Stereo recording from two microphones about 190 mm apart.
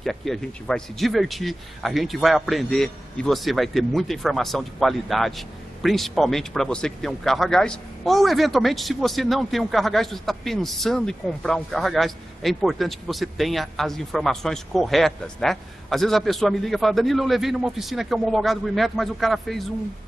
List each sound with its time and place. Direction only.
0.0 s speech: centre (ahead or behind)